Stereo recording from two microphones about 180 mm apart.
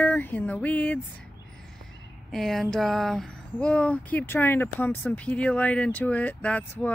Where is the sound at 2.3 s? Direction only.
Centre (ahead or behind).